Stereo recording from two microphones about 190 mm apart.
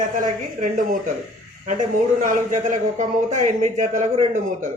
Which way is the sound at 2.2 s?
40° right (ahead or behind).